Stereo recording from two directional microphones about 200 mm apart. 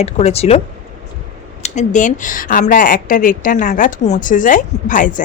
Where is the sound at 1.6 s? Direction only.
35° left (ahead or behind).